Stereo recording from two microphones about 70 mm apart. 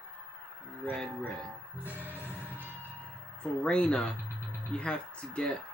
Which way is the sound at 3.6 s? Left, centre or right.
Centre.